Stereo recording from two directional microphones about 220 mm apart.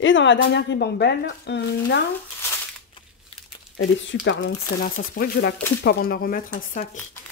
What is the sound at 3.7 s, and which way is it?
Speech, 55° left (ahead or behind).